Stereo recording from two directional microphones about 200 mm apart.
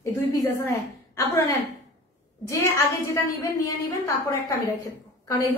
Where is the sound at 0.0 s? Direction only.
15° left (ahead or behind).